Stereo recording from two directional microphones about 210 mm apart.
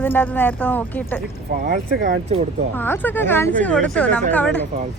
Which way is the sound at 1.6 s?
45° right (ahead or behind).